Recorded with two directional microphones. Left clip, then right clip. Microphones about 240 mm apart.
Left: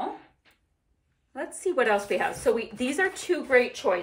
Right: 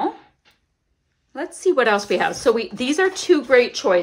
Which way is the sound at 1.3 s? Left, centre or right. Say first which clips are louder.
Right 9 dB; centre.